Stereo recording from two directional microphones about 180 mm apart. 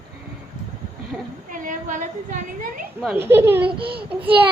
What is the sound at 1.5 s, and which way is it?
A woman's voice, 45° right (ahead or behind).